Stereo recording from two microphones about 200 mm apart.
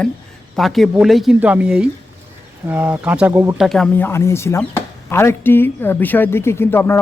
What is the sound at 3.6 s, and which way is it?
Speech, centre (ahead or behind).